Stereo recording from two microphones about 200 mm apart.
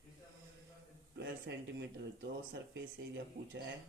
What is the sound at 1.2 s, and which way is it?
Speech, 60° right (ahead or behind).